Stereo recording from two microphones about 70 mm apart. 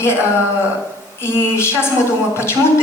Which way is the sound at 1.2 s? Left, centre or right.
Left.